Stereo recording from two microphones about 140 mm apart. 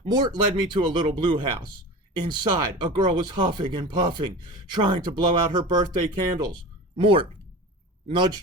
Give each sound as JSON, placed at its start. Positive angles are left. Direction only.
{"t": 0.0, "sound": "speech", "side_deg": -30}